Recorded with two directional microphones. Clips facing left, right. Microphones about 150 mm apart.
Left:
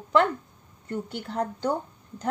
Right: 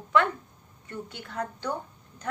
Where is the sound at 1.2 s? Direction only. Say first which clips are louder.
Left 4 dB; 30° left (ahead or behind).